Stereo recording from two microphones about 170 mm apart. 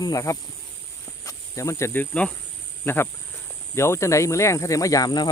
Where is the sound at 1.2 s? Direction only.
15° left (ahead or behind).